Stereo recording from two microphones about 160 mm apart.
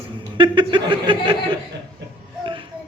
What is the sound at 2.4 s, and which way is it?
Babbling, 30° right (ahead or behind).